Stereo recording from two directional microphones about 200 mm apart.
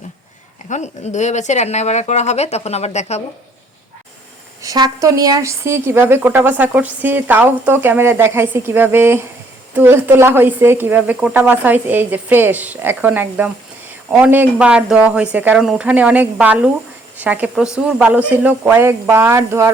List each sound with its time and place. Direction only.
0.7 s speech: 35° left (ahead or behind)
4.6 s a woman's voice: 15° right (ahead or behind)